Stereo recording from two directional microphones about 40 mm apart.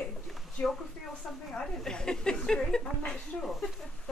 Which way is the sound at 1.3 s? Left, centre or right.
Centre.